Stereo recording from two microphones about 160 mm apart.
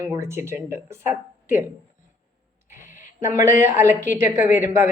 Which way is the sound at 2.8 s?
55° left (ahead or behind).